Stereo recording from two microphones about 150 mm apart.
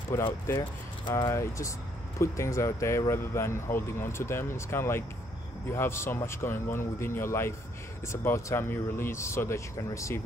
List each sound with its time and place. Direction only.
0.1 s speech: 15° left (ahead or behind)